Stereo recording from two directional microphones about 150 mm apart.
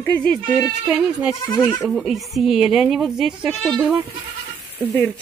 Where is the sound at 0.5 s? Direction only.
5° right (ahead or behind).